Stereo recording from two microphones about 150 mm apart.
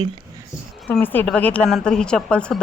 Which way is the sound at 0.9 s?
10° left (ahead or behind).